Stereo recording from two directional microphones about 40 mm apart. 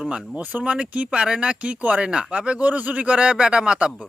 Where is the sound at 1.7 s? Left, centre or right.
Right.